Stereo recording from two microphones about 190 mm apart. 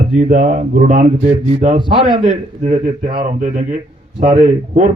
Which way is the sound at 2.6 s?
40° right (ahead or behind).